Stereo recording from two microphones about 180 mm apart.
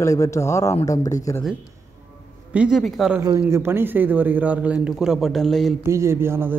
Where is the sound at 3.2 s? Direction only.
15° right (ahead or behind); by 5.8 s centre (ahead or behind).